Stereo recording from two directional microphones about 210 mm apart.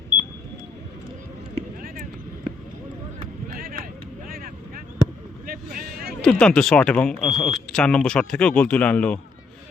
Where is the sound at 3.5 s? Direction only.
45° right (ahead or behind).